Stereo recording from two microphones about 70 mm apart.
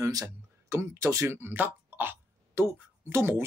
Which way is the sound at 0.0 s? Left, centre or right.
Right.